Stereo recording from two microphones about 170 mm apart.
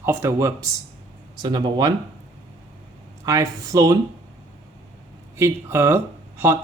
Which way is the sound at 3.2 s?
20° right (ahead or behind).